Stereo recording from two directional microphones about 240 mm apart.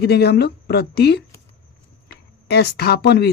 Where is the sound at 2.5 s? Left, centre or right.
Left.